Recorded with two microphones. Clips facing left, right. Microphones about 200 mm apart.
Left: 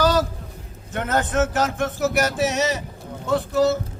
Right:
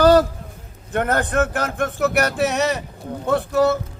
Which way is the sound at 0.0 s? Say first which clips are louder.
Right 6 dB; 55° right (ahead or behind).